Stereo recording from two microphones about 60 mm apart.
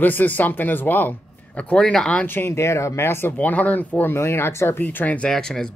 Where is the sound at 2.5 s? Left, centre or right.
Left.